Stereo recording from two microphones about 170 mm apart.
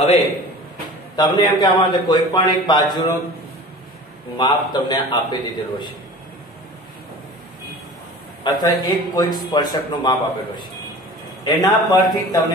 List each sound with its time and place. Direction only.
1.1 s a man's voice: 25° left (ahead or behind)
4.4 s a man's voice: 25° left (ahead or behind)
8.5 s a man's voice: 25° left (ahead or behind)